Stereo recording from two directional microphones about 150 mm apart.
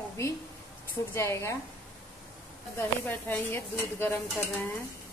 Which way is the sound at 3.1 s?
15° left (ahead or behind).